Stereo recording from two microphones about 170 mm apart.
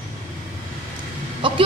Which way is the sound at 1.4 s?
30° right (ahead or behind).